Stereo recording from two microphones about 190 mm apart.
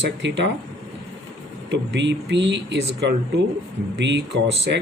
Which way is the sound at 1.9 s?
65° right (ahead or behind).